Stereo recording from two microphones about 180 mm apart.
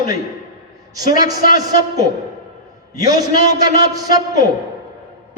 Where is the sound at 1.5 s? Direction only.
20° right (ahead or behind).